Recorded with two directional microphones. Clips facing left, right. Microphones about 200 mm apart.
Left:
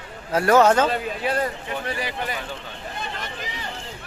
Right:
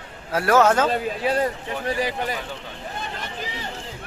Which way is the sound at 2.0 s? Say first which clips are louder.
Right 4 dB; 40° right (ahead or behind).